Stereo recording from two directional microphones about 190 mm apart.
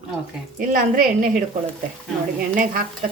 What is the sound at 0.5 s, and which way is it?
Speech, 50° right (ahead or behind).